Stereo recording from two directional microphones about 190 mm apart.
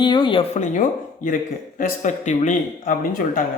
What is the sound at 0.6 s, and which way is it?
Speech, 45° left (ahead or behind).